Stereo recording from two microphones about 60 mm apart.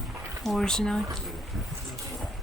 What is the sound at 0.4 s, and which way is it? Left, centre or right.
Speech, centre.